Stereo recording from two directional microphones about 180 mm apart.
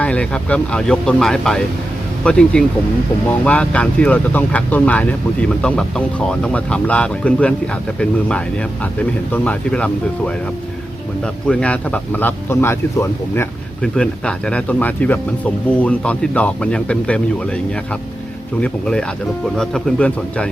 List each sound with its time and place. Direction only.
0.0 s speech: 5° left (ahead or behind)
9.3 s speech: 5° left (ahead or behind)
11.4 s speech: 5° left (ahead or behind)
18.6 s speech: 5° left (ahead or behind)